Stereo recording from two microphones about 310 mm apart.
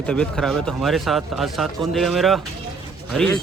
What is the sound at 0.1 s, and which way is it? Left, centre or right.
Speech, centre.